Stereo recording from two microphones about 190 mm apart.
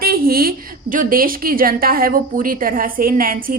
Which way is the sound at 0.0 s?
50° right (ahead or behind).